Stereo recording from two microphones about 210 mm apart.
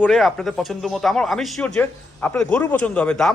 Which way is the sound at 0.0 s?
Centre (ahead or behind).